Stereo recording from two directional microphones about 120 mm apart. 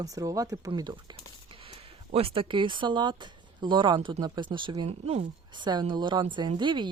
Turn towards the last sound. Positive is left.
turn(degrees=-40)  # may be behind; listen again after turning